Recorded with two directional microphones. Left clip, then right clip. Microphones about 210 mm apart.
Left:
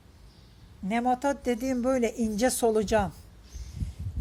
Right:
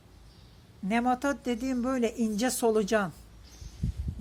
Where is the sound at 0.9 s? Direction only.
Centre (ahead or behind).